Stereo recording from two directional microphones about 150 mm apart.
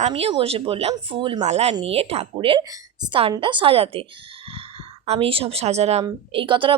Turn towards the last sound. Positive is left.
turn(degrees=-35)  # may be behind; listen again after turning